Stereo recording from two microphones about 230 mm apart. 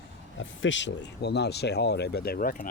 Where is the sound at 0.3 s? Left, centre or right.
Left.